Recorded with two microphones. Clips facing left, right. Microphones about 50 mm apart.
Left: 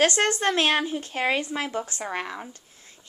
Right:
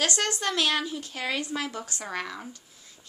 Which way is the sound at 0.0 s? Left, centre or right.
Left.